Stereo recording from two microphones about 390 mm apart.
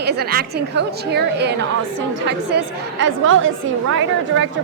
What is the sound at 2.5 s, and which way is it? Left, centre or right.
Speech, right.